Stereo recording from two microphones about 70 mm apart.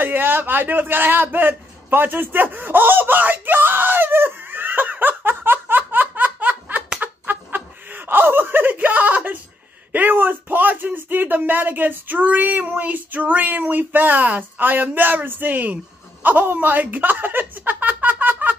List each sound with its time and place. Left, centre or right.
0.0 s a sound: right
7.0 s chicken: right
9.9 s speech: right